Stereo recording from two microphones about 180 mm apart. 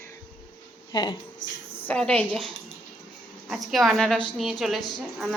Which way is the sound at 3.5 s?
Centre (ahead or behind).